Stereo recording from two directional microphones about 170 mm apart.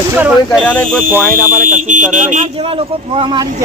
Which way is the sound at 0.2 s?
5° right (ahead or behind).